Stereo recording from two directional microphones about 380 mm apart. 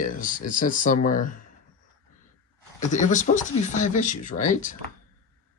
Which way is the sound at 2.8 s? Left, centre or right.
Centre.